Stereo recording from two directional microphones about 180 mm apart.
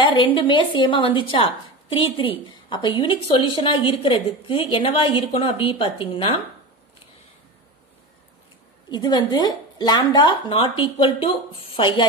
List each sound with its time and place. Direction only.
0.0 s a woman's voice: 25° left (ahead or behind)
8.9 s a woman's voice: 25° left (ahead or behind)